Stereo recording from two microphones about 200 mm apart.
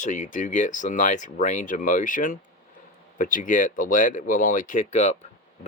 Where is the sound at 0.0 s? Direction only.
40° left (ahead or behind).